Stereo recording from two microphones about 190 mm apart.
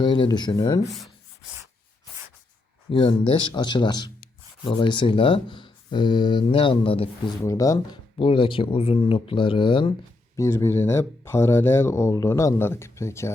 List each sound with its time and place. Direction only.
0.0 s speech: 25° left (ahead or behind)
0.9 s rub: centre (ahead or behind)
2.9 s speech: 25° left (ahead or behind)
7.4 s speech: 20° left (ahead or behind)
10.3 s speech: 15° left (ahead or behind)